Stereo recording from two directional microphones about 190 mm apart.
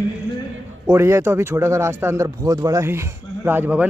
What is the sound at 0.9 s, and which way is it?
Speech, 15° right (ahead or behind).